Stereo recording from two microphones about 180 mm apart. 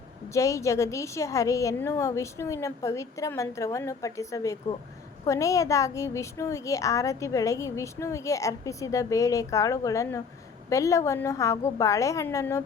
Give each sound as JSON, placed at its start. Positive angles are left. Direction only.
{"t": 0.3, "sound": "a woman's voice", "side_deg": 15}